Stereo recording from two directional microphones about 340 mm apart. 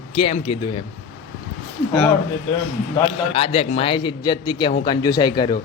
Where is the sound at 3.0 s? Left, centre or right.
Centre.